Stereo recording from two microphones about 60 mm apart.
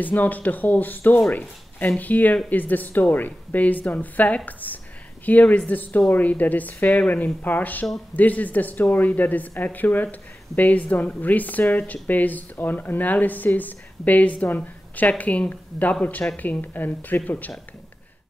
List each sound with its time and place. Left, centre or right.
0.0 s speech: left
4.5 s a sound: left
5.2 s speech: left